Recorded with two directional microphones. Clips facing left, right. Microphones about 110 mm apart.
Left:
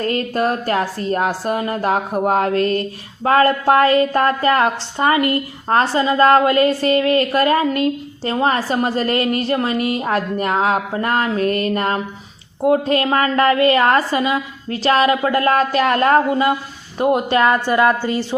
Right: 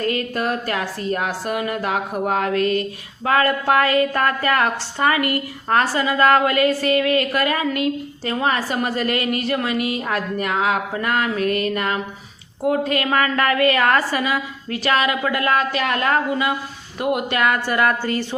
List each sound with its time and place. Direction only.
0.0 s a woman's voice: 35° left (ahead or behind); by 18.3 s 15° left (ahead or behind)